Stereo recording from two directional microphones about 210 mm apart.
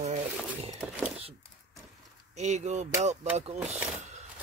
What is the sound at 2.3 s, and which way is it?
Speech, 35° right (ahead or behind).